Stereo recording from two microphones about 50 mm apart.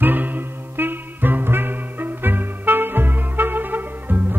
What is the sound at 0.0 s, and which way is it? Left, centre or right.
Music, right.